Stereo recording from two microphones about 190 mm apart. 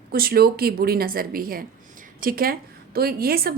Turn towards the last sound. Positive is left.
turn(degrees=-55)  # may be behind; listen again after turning